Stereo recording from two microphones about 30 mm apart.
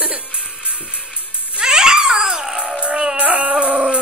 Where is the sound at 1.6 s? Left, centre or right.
Right.